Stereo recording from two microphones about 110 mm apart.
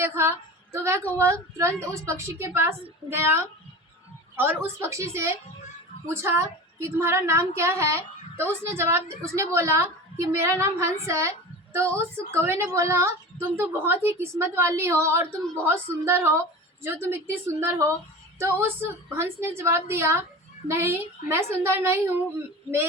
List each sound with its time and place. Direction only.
0.0 s a woman's voice: 20° right (ahead or behind)